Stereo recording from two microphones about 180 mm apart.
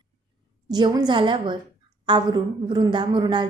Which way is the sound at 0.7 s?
25° right (ahead or behind).